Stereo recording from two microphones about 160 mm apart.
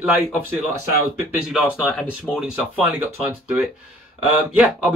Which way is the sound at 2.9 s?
10° right (ahead or behind).